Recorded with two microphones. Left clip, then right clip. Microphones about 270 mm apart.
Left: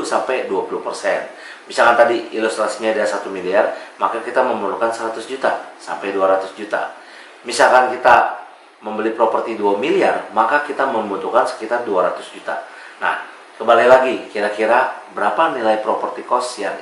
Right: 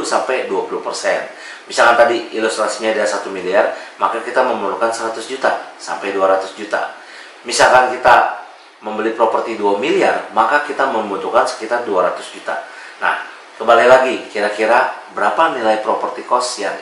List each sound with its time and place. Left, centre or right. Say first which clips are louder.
0.1 s speech: right 2 dB; centre
0.5 s speech: right 1 dB; left
9.8 s speech: right 2 dB; centre
15.9 s speech: right 2 dB; centre